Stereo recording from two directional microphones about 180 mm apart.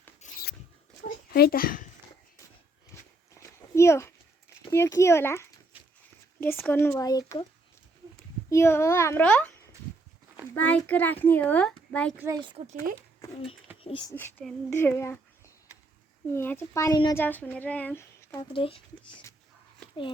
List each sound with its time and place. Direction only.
0.2 s a sound: 40° left (ahead or behind)
1.0 s a child's voice: 60° left (ahead or behind)
2.9 s a sound: 15° left (ahead or behind)
4.7 s a child's voice: 15° left (ahead or behind)
5.7 s a sound: 10° right (ahead or behind)
6.4 s a child's voice: 10° left (ahead or behind)
8.4 s a child's voice: 15° left (ahead or behind)
12.1 s speech: 10° right (ahead or behind)
12.4 s speech: 25° right (ahead or behind)
14.1 s a child's voice: 10° left (ahead or behind)
16.3 s a child's voice: 15° left (ahead or behind)
17.2 s a child's voice: 10° left (ahead or behind)
18.3 s speech: 30° left (ahead or behind)